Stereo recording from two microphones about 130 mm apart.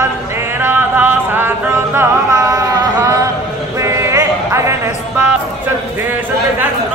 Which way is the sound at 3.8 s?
20° right (ahead or behind).